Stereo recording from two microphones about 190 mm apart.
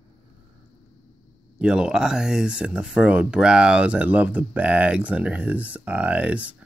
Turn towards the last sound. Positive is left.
turn(degrees=-5)  # may be behind; listen again after turning